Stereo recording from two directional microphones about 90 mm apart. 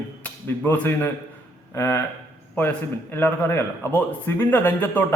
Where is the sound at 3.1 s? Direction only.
25° left (ahead or behind).